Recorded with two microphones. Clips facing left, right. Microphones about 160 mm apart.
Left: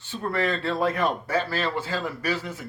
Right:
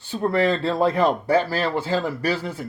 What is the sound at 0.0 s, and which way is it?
Speech, 35° right (ahead or behind).